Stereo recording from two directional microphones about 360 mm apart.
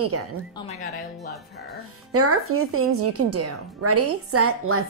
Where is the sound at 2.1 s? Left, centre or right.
Right.